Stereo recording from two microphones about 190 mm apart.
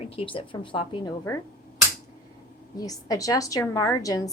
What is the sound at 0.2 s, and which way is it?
Speech, 25° left (ahead or behind).